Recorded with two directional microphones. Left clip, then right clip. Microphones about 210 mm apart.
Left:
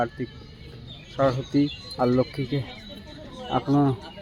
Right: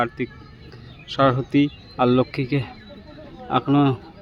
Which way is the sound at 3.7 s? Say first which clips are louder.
Right 3 dB; 20° right (ahead or behind).